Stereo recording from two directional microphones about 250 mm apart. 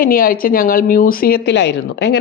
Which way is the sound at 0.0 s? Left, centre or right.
Left.